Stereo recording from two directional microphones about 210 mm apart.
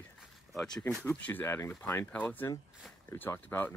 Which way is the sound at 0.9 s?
5° left (ahead or behind).